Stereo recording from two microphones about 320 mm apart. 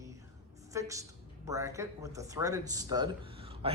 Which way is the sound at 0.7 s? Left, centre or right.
Centre.